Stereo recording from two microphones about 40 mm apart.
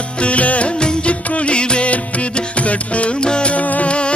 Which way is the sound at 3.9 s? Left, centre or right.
Left.